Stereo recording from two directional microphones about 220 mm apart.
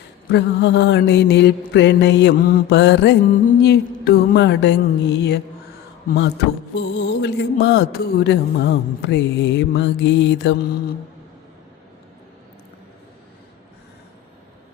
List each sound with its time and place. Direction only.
0.3 s speech: 50° left (ahead or behind)